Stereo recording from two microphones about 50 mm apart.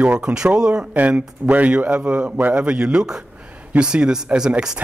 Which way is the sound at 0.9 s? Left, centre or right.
Right.